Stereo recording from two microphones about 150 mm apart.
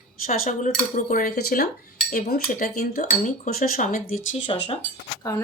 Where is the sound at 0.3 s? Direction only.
60° left (ahead or behind); by 3.0 s 85° left.